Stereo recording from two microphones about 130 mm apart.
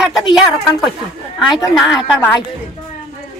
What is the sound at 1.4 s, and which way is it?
Speech, 30° left (ahead or behind).